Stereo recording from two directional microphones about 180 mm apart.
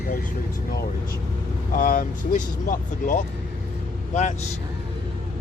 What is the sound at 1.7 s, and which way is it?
Speech, 50° left (ahead or behind).